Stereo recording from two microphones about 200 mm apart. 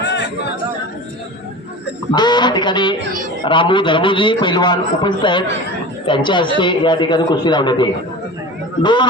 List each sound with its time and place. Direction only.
0.0 s chatter: 60° left (ahead or behind)
2.1 s a man's voice: 20° left (ahead or behind)